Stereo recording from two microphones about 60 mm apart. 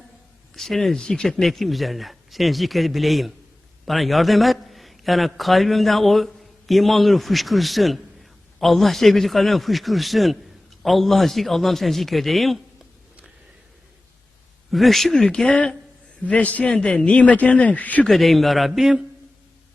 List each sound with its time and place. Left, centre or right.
0.5 s a man's voice: centre
14.7 s a man's voice: centre; by 18.0 s left
18.0 s a man's voice: centre